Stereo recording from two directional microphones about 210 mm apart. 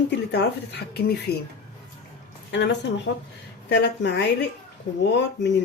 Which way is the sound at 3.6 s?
55° left (ahead or behind).